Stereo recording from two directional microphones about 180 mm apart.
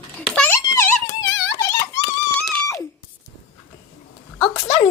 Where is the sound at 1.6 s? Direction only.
15° left (ahead or behind).